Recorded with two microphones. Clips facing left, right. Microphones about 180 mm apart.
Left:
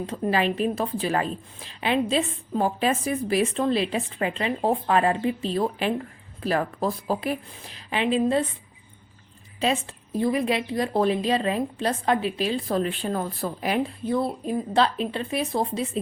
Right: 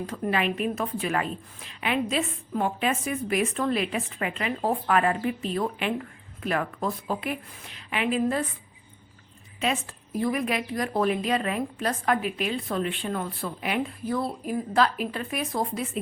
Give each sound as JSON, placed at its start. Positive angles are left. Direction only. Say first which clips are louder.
{"t": 0.0, "sound": "a woman's voice", "louder": "left 3 dB", "side_deg": 30}
{"t": 9.6, "sound": "a woman's voice", "louder": "left 3 dB", "side_deg": 30}